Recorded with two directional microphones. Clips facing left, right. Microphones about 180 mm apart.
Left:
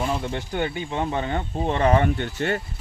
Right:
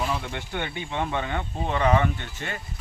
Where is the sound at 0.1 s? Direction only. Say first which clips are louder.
Left 4 dB; 35° left (ahead or behind).